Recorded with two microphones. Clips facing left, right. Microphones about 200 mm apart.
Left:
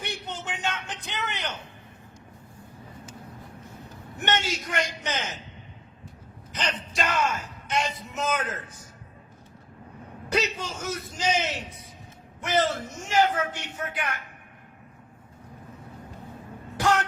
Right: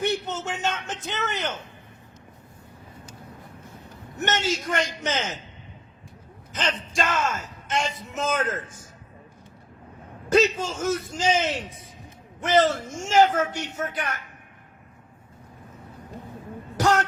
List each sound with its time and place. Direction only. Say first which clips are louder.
0.0 s speech: right 9 dB; 45° right (ahead or behind)
4.2 s speech: right 2 dB; 45° right (ahead or behind)
6.5 s speech: right 3 dB; 50° right (ahead or behind)
10.2 s speech: right 7 dB; 45° right (ahead or behind)
16.7 s music: right 2 dB; 40° right (ahead or behind)